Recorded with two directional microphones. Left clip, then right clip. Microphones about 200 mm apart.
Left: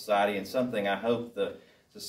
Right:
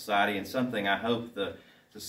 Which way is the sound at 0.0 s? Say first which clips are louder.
Left 1 dB; 20° left (ahead or behind).